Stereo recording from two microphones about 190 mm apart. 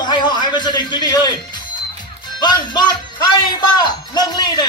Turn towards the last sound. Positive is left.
turn(degrees=20)  # may be behind; listen again after turning